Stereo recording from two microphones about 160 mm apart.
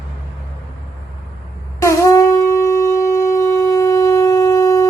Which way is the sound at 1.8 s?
20° left (ahead or behind).